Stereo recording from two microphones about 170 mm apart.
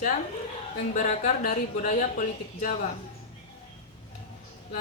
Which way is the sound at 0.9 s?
50° left (ahead or behind).